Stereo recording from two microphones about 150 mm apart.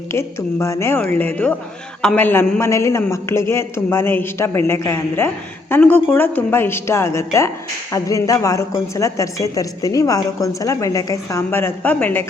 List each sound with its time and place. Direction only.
0.1 s a man's voice: 20° left (ahead or behind)